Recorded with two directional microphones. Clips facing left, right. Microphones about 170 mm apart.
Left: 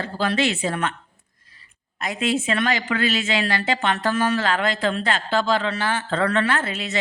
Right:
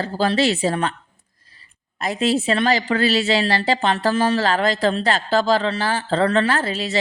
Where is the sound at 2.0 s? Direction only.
35° right (ahead or behind).